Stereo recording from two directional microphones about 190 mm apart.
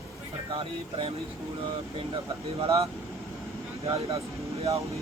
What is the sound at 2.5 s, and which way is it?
Speech, 30° right (ahead or behind).